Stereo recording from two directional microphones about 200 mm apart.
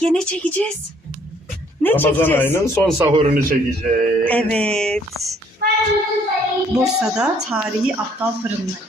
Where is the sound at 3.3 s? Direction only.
45° right (ahead or behind).